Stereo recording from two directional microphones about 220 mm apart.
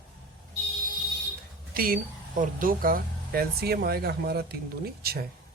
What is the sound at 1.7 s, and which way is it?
A man's voice, 40° right (ahead or behind).